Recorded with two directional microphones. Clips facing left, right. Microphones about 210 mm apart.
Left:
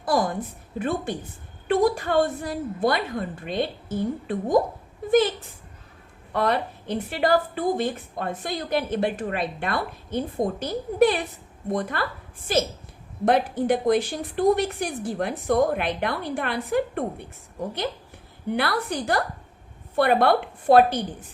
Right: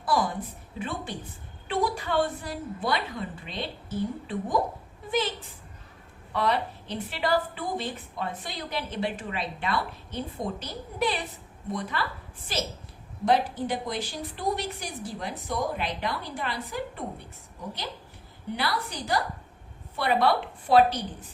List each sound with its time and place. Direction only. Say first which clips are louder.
0.0 s a sound: left 3 dB; 45° left (ahead or behind)
0.8 s a woman's voice: left 7 dB; 45° left (ahead or behind)
6.3 s a woman's voice: left 3 dB; 50° left (ahead or behind)
13.2 s a woman's voice: left 4 dB; 55° left (ahead or behind)
18.5 s a woman's voice: left 6 dB; 55° left (ahead or behind)